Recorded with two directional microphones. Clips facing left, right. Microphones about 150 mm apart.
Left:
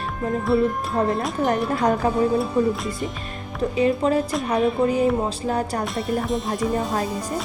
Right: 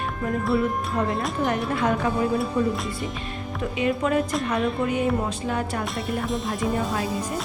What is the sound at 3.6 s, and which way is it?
Music, 35° left (ahead or behind).